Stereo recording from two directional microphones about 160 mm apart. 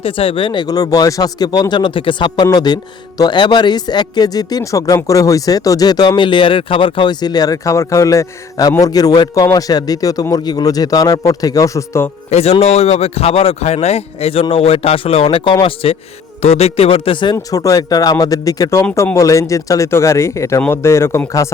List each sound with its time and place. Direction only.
0.0 s a man's voice: 35° left (ahead or behind); by 12.0 s 20° left (ahead or behind)
12.3 s speech: 40° left (ahead or behind)
17.3 s a man's voice: 20° left (ahead or behind)